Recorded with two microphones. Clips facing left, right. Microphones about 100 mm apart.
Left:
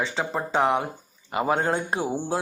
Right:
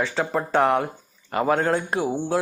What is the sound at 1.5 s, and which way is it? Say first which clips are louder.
Speech: right 2 dB; 25° left (ahead or behind).